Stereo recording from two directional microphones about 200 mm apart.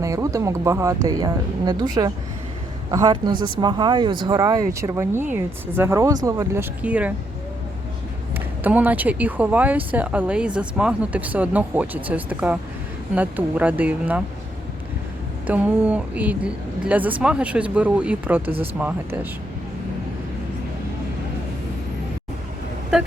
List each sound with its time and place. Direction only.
0.0 s speech: 15° right (ahead or behind)
8.6 s speech: 10° right (ahead or behind)
15.4 s speech: 10° right (ahead or behind)